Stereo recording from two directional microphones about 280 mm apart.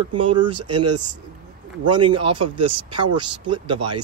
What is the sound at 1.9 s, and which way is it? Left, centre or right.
Speech, centre.